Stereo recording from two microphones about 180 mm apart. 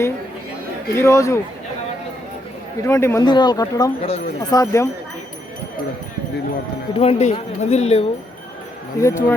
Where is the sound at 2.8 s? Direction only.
15° left (ahead or behind).